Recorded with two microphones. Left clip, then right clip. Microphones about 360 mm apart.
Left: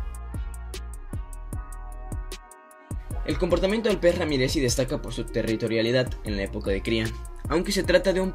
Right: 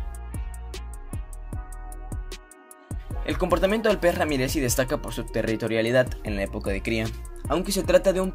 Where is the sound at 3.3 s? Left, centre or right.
Centre.